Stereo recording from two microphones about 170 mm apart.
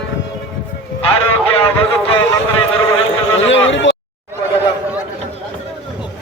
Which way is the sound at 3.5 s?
90° left.